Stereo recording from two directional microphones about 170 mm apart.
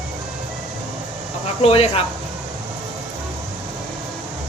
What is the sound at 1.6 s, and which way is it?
Speech, 35° left (ahead or behind).